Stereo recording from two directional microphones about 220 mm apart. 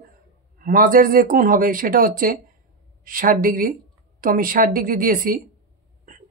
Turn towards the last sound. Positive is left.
turn(degrees=-40)  # may be behind; listen again after turning